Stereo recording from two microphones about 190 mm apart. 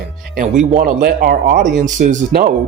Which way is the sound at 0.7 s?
45° right (ahead or behind).